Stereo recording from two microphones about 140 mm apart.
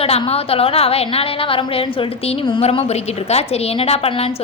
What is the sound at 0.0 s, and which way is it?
A woman's voice, 45° left (ahead or behind).